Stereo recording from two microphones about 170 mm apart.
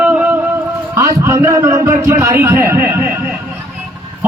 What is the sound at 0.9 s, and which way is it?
A man's voice, 20° right (ahead or behind).